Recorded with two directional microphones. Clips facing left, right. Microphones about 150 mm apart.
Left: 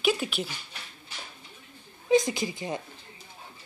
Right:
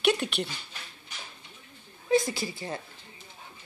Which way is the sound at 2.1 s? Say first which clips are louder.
Left 2 dB; 20° left (ahead or behind).